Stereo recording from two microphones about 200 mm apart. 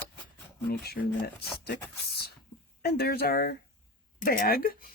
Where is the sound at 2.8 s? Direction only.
50° left (ahead or behind).